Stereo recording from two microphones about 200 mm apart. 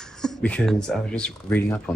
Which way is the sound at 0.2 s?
5° left (ahead or behind).